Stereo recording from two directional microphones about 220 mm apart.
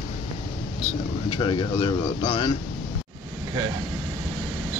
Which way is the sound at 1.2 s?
20° left (ahead or behind).